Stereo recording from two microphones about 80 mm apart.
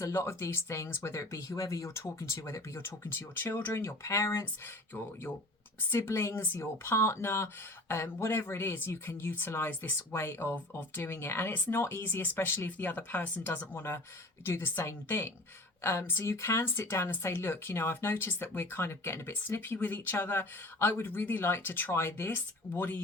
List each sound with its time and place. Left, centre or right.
0.0 s speech: left
4.9 s speech: left